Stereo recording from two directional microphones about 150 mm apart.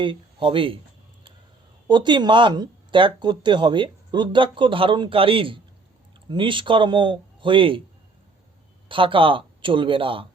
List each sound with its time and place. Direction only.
0.0 s speech: 35° right (ahead or behind)
1.9 s speech: 30° right (ahead or behind)
8.9 s speech: 35° right (ahead or behind)